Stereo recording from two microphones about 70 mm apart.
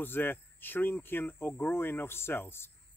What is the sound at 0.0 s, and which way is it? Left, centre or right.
Speech, left.